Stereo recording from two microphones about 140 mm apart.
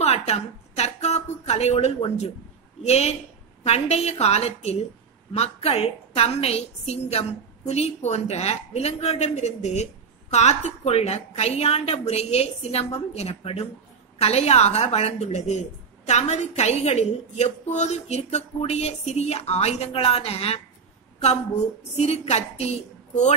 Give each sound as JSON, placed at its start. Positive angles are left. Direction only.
{"t": 0.0, "sound": "a sound", "side_deg": 50}
{"t": 2.8, "sound": "a woman's voice", "side_deg": 50}
{"t": 21.9, "sound": "a woman's voice", "side_deg": 50}